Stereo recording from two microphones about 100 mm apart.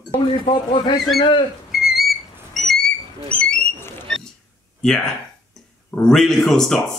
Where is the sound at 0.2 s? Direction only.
55° left (ahead or behind).